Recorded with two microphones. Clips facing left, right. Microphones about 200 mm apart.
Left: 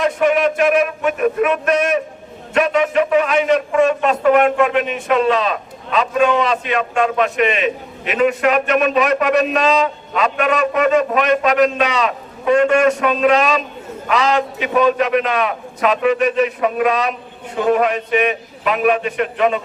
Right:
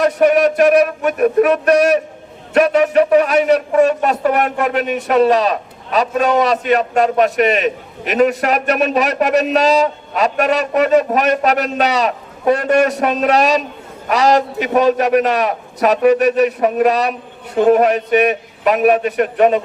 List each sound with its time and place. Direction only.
0.0 s a man's voice: 40° right (ahead or behind)